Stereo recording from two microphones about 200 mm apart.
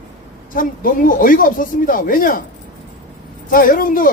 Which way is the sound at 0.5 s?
45° left (ahead or behind).